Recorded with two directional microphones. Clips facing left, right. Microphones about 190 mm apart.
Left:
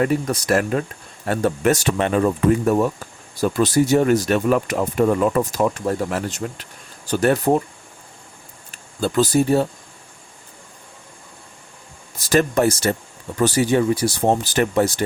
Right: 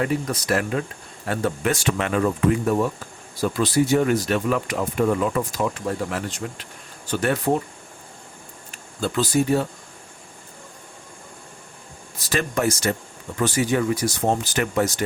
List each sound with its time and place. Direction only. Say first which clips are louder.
0.0 s speech: left 4 dB; 45° left (ahead or behind)
3.6 s speech: left 3 dB; 40° left (ahead or behind)
9.0 s speech: left 4 dB; 40° left (ahead or behind)
12.3 s speech: left 6 dB; 40° left (ahead or behind)